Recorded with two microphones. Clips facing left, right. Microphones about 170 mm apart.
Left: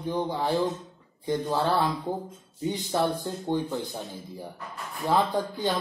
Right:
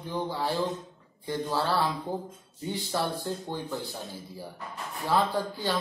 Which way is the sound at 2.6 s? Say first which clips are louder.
Left 4 dB; 15° left (ahead or behind).